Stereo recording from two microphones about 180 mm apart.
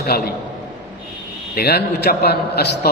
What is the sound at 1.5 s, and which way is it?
A man's voice, 60° left (ahead or behind).